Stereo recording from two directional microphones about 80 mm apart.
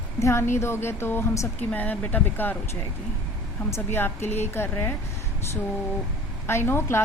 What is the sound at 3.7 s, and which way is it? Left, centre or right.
A woman's voice, left.